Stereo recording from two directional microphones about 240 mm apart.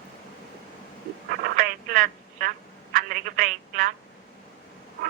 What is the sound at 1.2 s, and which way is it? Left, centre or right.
Telephone, right.